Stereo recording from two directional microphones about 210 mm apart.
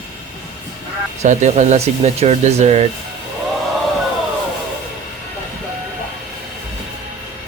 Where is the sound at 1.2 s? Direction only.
35° right (ahead or behind).